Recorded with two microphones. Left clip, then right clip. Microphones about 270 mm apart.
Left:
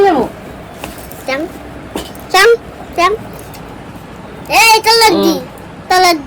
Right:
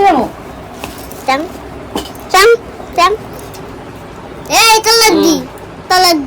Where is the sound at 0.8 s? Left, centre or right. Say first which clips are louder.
Right 3 dB; right.